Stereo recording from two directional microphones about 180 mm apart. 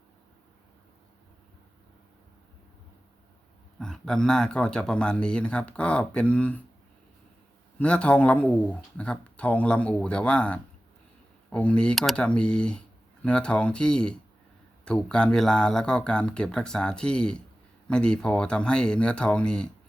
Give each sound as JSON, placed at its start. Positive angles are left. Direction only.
{"t": 3.8, "sound": "speech", "side_deg": 5}
{"t": 7.8, "sound": "speech", "side_deg": 5}